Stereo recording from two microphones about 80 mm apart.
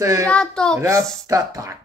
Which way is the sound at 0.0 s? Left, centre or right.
Right.